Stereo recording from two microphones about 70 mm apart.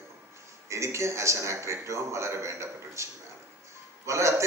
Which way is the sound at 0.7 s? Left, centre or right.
Right.